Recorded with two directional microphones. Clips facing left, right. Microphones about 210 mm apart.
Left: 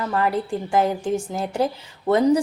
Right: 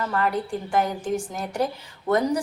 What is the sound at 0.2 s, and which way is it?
A woman's voice, 25° left (ahead or behind).